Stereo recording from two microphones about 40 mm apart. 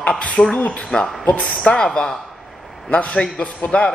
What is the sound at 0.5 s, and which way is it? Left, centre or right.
Speech, left.